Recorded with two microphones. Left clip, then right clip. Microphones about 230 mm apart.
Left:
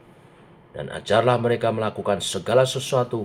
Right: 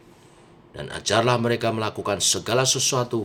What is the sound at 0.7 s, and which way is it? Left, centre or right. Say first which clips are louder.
Speech: left 2 dB; right.